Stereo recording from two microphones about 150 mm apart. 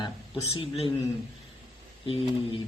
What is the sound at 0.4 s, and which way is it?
Speech, 40° left (ahead or behind).